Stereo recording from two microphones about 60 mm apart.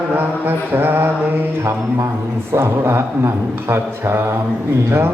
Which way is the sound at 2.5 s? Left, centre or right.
Right.